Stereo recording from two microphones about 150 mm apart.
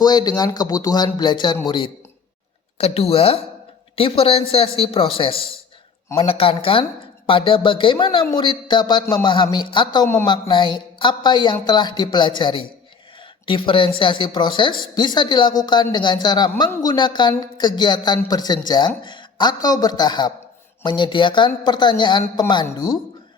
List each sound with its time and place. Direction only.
0.0 s speech: 25° left (ahead or behind)
2.7 s speech: 40° left (ahead or behind); by 23.0 s 25° left (ahead or behind)